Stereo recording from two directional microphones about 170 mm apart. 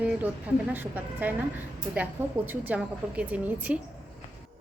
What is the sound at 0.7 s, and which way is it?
Speech, 10° right (ahead or behind).